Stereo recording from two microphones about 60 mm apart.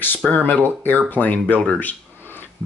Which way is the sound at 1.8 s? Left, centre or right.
Left.